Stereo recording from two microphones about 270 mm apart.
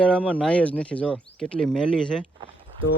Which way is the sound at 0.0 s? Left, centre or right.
Centre.